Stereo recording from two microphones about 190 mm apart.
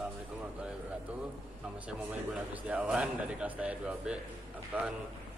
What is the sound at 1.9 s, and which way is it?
Speech, 5° right (ahead or behind).